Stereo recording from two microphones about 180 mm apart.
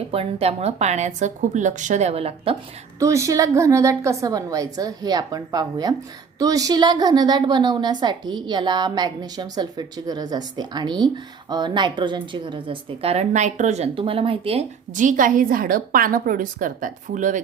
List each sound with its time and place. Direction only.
0.1 s a woman's voice: 35° right (ahead or behind)
3.0 s a woman's voice: 15° right (ahead or behind); by 17.4 s 45° right (ahead or behind)